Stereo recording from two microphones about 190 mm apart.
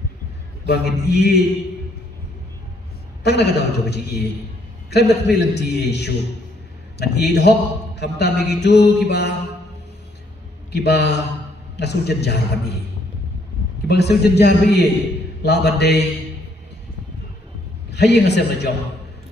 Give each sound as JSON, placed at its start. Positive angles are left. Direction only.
{"t": 0.7, "sound": "a man's voice", "side_deg": 60}
{"t": 3.3, "sound": "a man's voice", "side_deg": 60}
{"t": 10.7, "sound": "a man's voice", "side_deg": 60}
{"t": 13.8, "sound": "a man's voice", "side_deg": 60}
{"t": 17.9, "sound": "a man's voice", "side_deg": 60}